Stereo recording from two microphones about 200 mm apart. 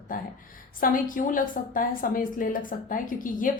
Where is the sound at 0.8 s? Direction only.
45° left (ahead or behind).